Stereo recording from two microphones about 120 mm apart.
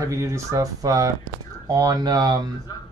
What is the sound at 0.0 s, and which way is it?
Speech, 25° right (ahead or behind).